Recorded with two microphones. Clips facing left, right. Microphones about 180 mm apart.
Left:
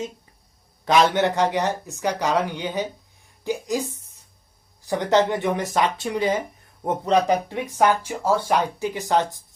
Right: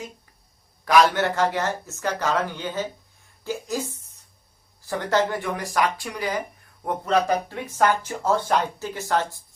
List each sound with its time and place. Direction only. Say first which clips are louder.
0.9 s speech: even; 20° left (ahead or behind)